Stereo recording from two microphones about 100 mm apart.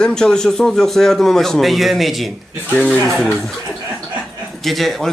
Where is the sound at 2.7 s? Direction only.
15° left (ahead or behind).